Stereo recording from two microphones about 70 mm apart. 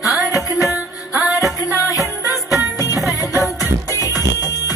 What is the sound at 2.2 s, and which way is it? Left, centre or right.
Music, left.